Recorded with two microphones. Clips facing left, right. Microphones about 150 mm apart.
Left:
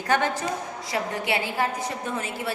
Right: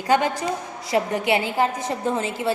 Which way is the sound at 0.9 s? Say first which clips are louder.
Right 6 dB; 25° right (ahead or behind).